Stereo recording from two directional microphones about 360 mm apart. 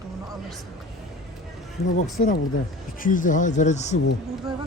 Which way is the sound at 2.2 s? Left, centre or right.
Left.